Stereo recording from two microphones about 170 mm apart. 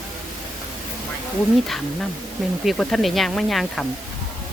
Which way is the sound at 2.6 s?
Centre (ahead or behind).